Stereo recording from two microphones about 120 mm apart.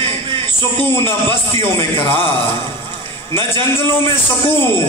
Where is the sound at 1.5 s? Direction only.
20° left (ahead or behind).